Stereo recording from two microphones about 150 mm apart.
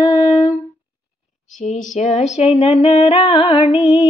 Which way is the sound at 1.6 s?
55° left (ahead or behind).